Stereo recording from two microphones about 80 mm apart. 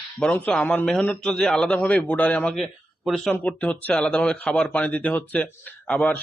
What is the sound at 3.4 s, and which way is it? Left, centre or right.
A man's voice, centre.